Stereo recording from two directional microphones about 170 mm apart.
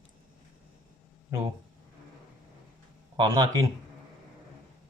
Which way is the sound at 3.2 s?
25° right (ahead or behind).